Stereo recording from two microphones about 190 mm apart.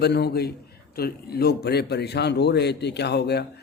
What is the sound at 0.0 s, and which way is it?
A man's voice, 60° left (ahead or behind).